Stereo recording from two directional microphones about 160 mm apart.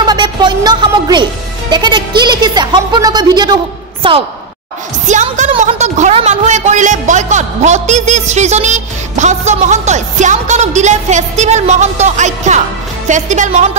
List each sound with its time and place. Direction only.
0.0 s a sound: 30° right (ahead or behind)
1.7 s a woman's voice: 30° right (ahead or behind)
5.0 s a woman's voice: 50° right (ahead or behind)